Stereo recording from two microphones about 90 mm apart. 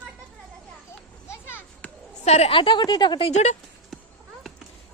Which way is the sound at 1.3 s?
25° left (ahead or behind).